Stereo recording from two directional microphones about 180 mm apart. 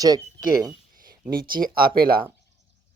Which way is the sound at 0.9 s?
50° right (ahead or behind).